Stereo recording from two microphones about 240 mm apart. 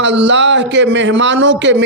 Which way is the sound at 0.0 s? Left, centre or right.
Right.